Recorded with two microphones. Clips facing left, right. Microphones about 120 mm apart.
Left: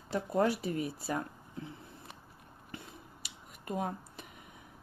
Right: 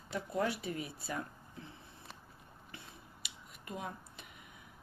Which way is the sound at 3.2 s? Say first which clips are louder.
Left 3 dB; 45° left (ahead or behind).